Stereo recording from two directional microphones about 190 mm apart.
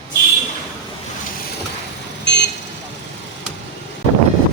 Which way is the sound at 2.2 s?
65° left (ahead or behind).